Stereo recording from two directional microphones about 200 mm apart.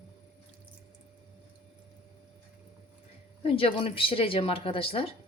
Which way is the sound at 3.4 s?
30° left (ahead or behind).